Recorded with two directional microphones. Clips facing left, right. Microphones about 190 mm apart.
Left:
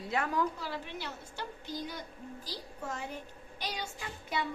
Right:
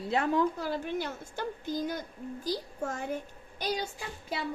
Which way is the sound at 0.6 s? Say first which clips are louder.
Right 7 dB; 45° right (ahead or behind).